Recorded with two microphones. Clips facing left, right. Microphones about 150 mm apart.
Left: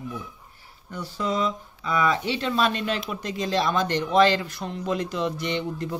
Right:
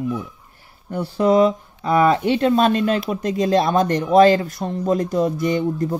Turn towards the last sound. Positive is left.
turn(degrees=-45)  # may be behind; listen again after turning